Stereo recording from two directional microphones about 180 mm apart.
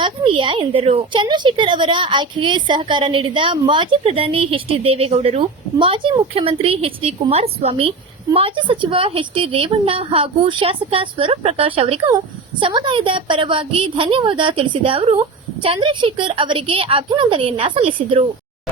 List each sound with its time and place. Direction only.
0.0 s a woman's voice: 30° right (ahead or behind)